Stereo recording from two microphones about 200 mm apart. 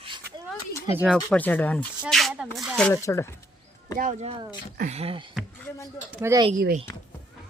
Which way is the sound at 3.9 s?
40° right (ahead or behind).